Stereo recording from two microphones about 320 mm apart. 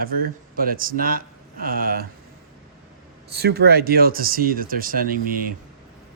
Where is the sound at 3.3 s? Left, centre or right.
Right.